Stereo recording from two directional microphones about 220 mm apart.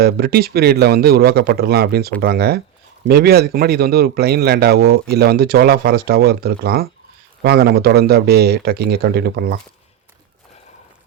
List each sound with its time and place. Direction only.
0.0 s a man's voice: 45° right (ahead or behind)